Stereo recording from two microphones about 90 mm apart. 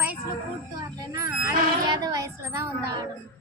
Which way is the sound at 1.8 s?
50° right (ahead or behind).